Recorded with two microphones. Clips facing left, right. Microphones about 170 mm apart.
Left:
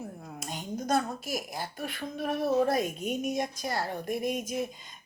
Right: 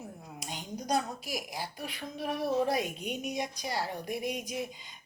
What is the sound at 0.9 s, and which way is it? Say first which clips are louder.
A woman's voice: left 3 dB; 45° left (ahead or behind).